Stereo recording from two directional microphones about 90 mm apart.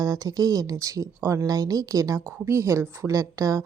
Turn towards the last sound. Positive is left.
turn(degrees=-35)  # may be behind; listen again after turning